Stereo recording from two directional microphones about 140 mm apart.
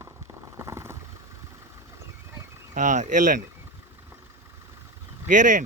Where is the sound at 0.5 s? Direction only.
20° right (ahead or behind).